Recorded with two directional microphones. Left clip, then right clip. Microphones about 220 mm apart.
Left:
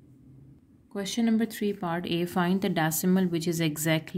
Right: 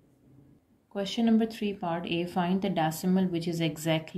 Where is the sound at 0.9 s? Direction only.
35° left (ahead or behind).